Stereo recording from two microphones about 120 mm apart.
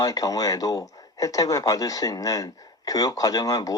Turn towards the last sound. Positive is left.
turn(degrees=30)  # may be behind; listen again after turning